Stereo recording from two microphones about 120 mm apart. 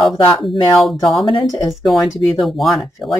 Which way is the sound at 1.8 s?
Centre (ahead or behind).